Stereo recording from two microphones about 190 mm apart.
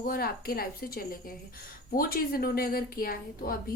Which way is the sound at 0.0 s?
50° left (ahead or behind).